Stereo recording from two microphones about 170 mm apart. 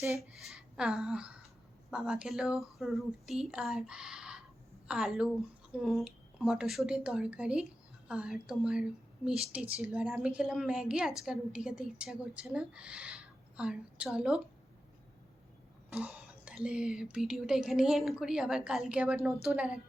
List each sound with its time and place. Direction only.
0.4 s speech: 5° right (ahead or behind)
16.0 s speech: 5° right (ahead or behind)